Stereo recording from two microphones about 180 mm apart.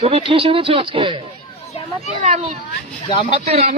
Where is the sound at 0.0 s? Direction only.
30° right (ahead or behind).